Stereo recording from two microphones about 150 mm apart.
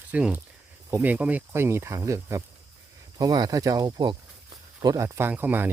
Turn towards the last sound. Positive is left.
turn(degrees=-15)  # may be behind; listen again after turning